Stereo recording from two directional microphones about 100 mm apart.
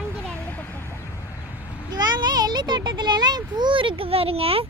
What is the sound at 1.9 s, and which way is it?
A child's voice, 45° right (ahead or behind).